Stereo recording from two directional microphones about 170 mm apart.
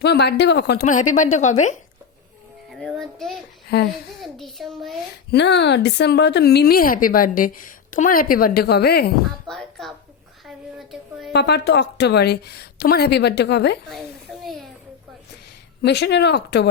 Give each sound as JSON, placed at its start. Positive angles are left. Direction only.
{"t": 0.0, "sound": "speech", "side_deg": 75}
{"t": 0.9, "sound": "a woman's voice", "side_deg": 45}
{"t": 2.7, "sound": "a child's voice", "side_deg": 0}
{"t": 3.7, "sound": "speech", "side_deg": 75}
{"t": 4.2, "sound": "a child's voice", "side_deg": 0}
{"t": 5.3, "sound": "speech", "side_deg": 85}
{"t": 9.5, "sound": "speech", "side_deg": 0}
{"t": 11.3, "sound": "a woman's voice", "side_deg": 80}
{"t": 14.4, "sound": "a sound", "side_deg": 0}
{"t": 15.8, "sound": "a woman's voice", "side_deg": 90}